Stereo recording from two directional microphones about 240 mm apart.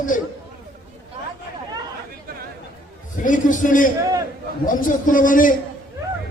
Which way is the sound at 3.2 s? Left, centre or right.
Left.